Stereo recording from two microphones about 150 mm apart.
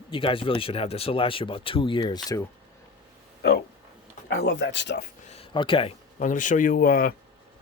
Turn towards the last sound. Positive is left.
turn(degrees=75)  # may be behind; listen again after turning